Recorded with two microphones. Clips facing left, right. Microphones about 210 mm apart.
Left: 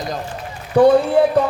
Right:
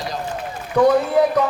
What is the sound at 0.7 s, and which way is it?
Speech, 30° left (ahead or behind).